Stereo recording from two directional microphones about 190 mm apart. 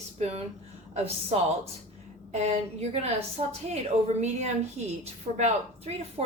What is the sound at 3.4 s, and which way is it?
A woman's voice, 30° right (ahead or behind).